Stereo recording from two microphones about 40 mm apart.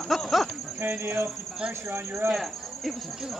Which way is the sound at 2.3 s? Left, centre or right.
Centre.